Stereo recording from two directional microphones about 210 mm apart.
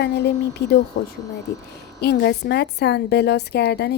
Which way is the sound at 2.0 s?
50° left (ahead or behind).